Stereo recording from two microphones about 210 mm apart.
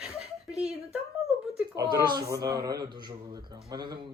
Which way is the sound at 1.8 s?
20° right (ahead or behind).